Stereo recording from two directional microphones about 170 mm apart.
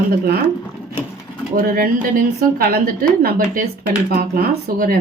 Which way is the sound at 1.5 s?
60° right (ahead or behind).